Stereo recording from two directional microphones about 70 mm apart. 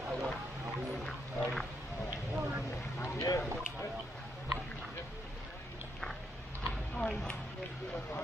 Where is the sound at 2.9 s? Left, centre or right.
Left.